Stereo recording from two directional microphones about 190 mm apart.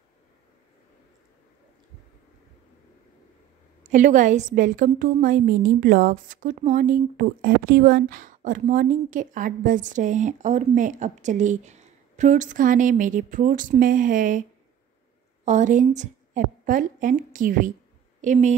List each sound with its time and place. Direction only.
3.8 s a woman's voice: 40° right (ahead or behind)
15.4 s a woman's voice: 40° right (ahead or behind)